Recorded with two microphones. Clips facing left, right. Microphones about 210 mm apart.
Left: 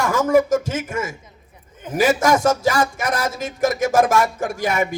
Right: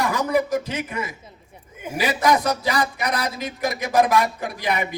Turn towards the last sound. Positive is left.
turn(degrees=45)  # may be behind; listen again after turning